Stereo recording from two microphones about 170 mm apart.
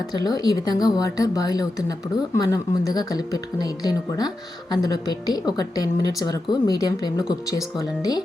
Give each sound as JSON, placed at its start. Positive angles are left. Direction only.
{"t": 0.1, "sound": "a woman's voice", "side_deg": 25}